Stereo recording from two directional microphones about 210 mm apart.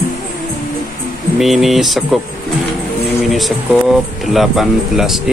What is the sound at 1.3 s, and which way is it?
Speech, centre (ahead or behind).